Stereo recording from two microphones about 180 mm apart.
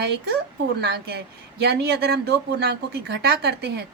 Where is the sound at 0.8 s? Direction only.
60° right (ahead or behind).